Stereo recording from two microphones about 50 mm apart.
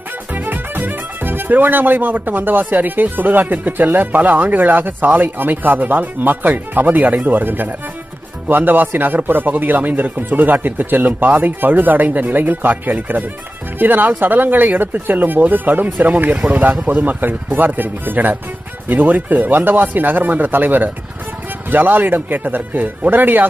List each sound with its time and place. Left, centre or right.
0.3 s speech: right